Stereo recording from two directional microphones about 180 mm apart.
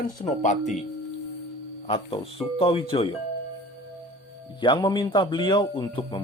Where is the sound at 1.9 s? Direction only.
30° left (ahead or behind).